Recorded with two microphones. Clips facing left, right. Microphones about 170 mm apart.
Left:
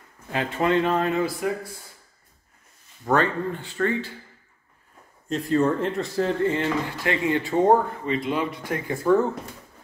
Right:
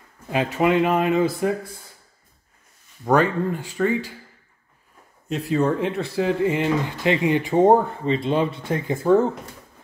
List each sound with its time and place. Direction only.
0.3 s speech: 15° right (ahead or behind)
3.1 s speech: 10° right (ahead or behind)
5.5 s speech: centre (ahead or behind); by 9.3 s 20° right (ahead or behind)